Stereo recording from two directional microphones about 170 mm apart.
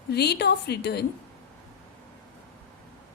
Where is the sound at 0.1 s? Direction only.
75° left (ahead or behind).